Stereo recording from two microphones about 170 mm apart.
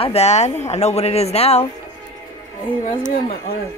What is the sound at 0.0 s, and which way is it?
Speech, 40° left (ahead or behind).